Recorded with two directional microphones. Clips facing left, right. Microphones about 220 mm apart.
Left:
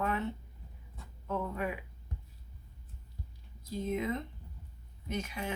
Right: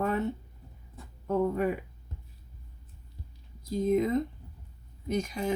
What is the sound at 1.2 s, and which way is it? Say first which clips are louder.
Speech: right 8 dB; 35° right (ahead or behind).